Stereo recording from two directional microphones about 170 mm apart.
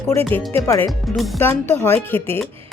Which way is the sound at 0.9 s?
Centre (ahead or behind).